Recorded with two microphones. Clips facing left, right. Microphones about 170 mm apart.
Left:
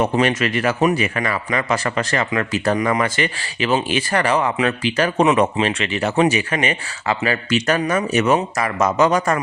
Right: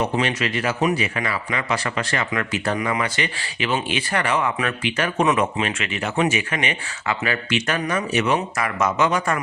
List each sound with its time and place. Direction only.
0.0 s a man's voice: 50° left (ahead or behind)